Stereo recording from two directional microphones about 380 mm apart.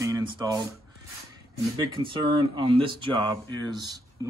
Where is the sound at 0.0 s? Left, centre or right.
Centre.